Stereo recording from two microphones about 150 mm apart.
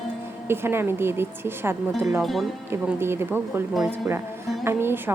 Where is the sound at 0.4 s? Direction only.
15° right (ahead or behind).